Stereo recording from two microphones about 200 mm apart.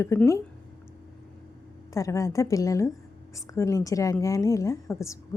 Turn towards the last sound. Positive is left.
turn(degrees=15)  # may be behind; listen again after turning